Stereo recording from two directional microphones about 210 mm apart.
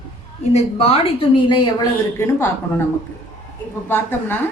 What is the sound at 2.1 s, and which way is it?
Speech, 10° left (ahead or behind).